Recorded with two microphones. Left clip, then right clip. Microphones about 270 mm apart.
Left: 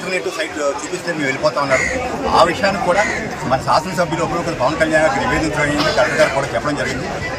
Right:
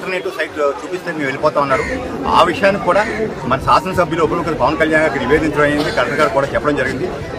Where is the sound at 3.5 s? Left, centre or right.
Centre.